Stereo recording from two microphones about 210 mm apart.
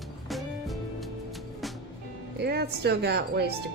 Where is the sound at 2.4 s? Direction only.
50° right (ahead or behind).